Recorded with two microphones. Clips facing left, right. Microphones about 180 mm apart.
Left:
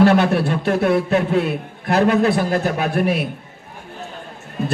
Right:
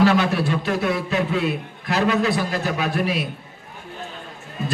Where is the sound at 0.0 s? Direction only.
55° left (ahead or behind).